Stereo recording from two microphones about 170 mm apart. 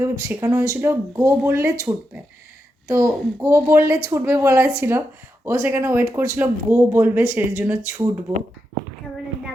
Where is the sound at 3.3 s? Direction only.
15° right (ahead or behind).